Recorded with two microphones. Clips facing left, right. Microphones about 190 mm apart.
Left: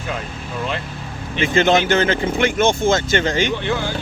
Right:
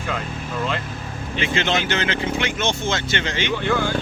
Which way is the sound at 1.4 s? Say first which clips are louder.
Left 7 dB; 45° left (ahead or behind).